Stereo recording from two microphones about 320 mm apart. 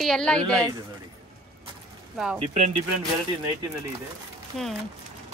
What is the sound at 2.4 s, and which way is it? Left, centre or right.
Speech, right.